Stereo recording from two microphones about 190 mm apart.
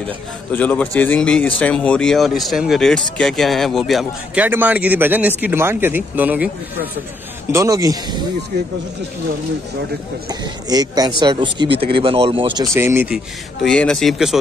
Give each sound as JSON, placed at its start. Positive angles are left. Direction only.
{"t": 0.5, "sound": "speech", "side_deg": 10}
{"t": 7.5, "sound": "speech", "side_deg": -15}
{"t": 10.7, "sound": "speech", "side_deg": -20}
{"t": 12.7, "sound": "speech", "side_deg": -10}